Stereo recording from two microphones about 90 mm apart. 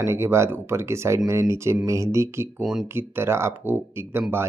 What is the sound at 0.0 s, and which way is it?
Speech, 30° right (ahead or behind).